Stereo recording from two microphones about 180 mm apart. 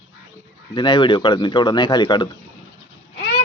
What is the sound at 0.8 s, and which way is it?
A man's voice, 25° left (ahead or behind).